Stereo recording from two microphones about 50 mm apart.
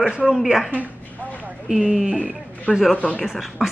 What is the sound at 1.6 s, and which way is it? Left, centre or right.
Speech, centre.